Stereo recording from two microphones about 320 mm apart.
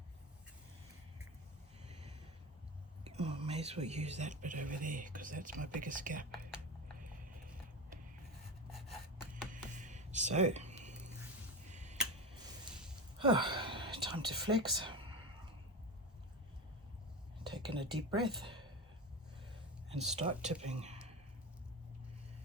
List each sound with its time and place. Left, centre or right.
3.0 s speech: centre
8.7 s gasp: centre
9.7 s a sound: right
11.7 s tick-tock: right
13.1 s whispering: centre
14.4 s speech: centre
17.4 s speech: centre
19.9 s speech: centre